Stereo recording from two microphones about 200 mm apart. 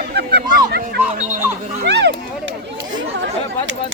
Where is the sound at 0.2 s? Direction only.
55° right (ahead or behind).